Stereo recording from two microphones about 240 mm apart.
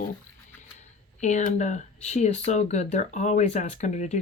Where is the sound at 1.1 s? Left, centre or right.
Left.